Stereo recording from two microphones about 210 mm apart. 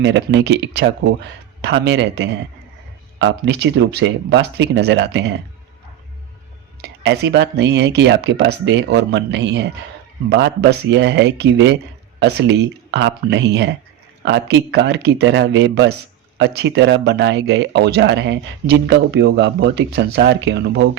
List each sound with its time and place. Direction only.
0.0 s speech: 55° right (ahead or behind)
7.0 s speech: 55° right (ahead or behind)